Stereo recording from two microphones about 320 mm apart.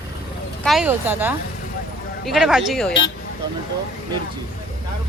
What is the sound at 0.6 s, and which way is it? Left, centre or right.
Speech, centre.